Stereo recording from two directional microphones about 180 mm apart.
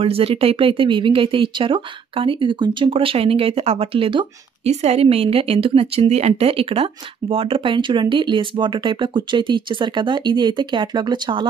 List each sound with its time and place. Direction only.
0.0 s speech: 30° right (ahead or behind)